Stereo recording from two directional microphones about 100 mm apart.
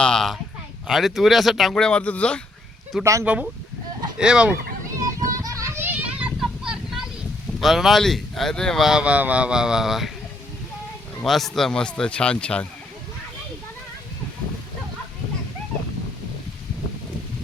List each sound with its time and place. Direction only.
0.0 s a sound: 5° left (ahead or behind)
0.9 s speech: centre (ahead or behind)
3.0 s speech: 30° right (ahead or behind)
3.2 s speech: 10° right (ahead or behind)
4.9 s children playing: 35° right (ahead or behind); by 6.3 s 15° right (ahead or behind)
6.4 s vehicle: 5° right (ahead or behind)
7.6 s speech: centre (ahead or behind)
11.2 s speech: centre (ahead or behind)